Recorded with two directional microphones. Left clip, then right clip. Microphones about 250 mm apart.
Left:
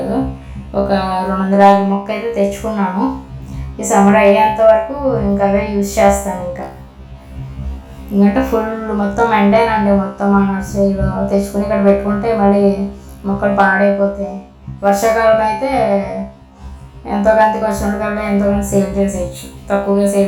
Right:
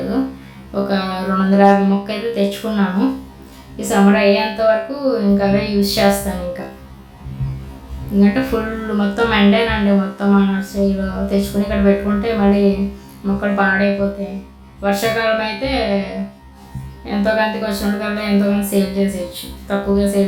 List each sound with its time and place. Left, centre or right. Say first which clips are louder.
0.0 s music: left 2 dB; centre
0.7 s speech: left 5 dB; centre
6.3 s music: left 2 dB; centre
8.2 s speech: left 3 dB; centre
14.8 s speech: left 5 dB; centre
15.6 s speech: left 5 dB; centre
18.7 s speech: left 3 dB; centre